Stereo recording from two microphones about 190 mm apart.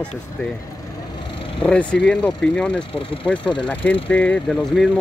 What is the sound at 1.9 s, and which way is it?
Speech, 5° left (ahead or behind).